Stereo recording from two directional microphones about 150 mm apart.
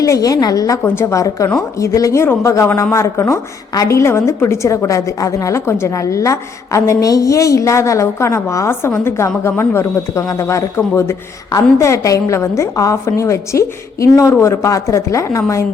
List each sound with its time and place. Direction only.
0.0 s a woman's voice: 25° left (ahead or behind)